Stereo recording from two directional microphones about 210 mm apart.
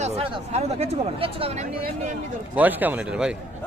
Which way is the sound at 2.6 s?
10° right (ahead or behind).